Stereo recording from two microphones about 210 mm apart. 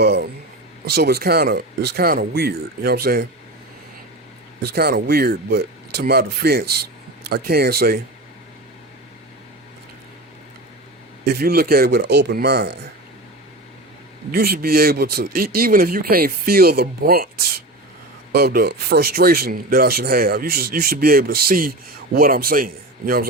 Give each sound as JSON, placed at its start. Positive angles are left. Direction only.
{"t": 0.0, "sound": "speech", "side_deg": -50}
{"t": 4.6, "sound": "speech", "side_deg": -45}
{"t": 11.3, "sound": "speech", "side_deg": -45}
{"t": 14.3, "sound": "speech", "side_deg": -45}
{"t": 18.3, "sound": "speech", "side_deg": -50}